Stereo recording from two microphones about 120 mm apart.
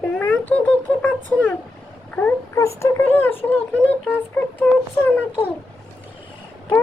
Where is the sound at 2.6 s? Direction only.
25° left (ahead or behind).